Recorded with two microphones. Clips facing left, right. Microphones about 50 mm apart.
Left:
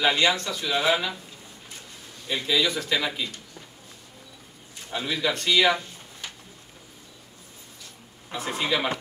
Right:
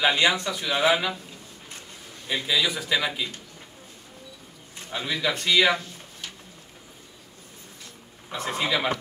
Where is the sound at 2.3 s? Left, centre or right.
Centre.